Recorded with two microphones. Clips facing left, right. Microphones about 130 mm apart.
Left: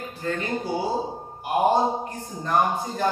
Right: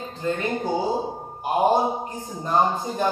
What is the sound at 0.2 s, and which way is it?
Speech, 20° right (ahead or behind).